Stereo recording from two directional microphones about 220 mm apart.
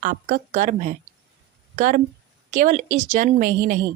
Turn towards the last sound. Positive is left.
turn(degrees=-40)  # may be behind; listen again after turning